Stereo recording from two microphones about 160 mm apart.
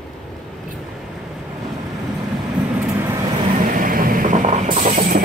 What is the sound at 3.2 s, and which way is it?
Vehicle, 30° right (ahead or behind).